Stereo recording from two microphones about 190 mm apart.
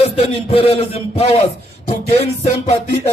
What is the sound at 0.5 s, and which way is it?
A man's voice, 30° left (ahead or behind).